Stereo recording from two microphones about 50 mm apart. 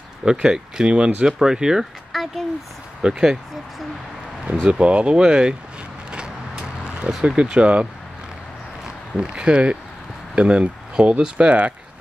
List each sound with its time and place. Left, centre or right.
0.2 s speech: centre
2.1 s a sound: centre
3.0 s speech: centre
4.6 s speech: right
6.1 s vehicle: centre
8.8 s speech: centre